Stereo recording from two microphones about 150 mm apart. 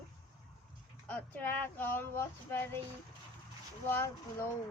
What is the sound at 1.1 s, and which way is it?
Speech, 10° left (ahead or behind).